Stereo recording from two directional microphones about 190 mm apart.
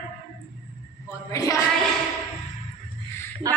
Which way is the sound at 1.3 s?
15° left (ahead or behind).